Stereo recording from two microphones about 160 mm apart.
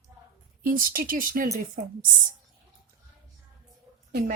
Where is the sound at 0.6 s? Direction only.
60° right (ahead or behind).